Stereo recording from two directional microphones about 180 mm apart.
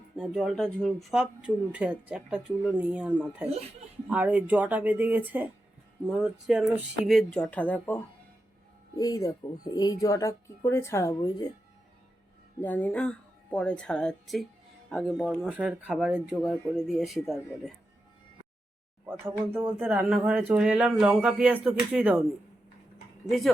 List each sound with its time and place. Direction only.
0.2 s speech: centre (ahead or behind)
9.0 s speech: 20° left (ahead or behind)
12.5 s speech: 10° left (ahead or behind)
19.8 s speech: 5° right (ahead or behind)
23.2 s speech: centre (ahead or behind)